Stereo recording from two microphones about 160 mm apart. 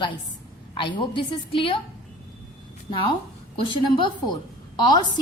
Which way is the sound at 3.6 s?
30° left (ahead or behind).